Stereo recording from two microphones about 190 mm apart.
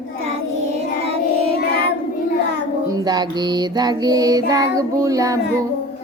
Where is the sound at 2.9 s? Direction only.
20° right (ahead or behind).